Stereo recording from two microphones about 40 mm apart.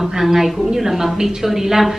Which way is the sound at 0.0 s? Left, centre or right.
Centre.